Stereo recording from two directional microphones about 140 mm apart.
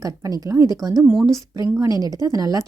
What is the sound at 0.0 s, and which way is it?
Speech, 25° right (ahead or behind).